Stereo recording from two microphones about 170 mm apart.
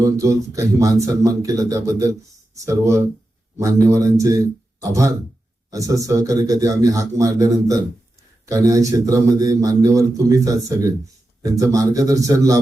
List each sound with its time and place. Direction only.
0.0 s speech: 20° right (ahead or behind)